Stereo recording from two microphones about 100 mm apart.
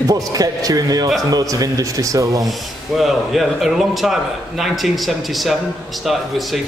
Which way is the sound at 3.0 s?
Centre (ahead or behind).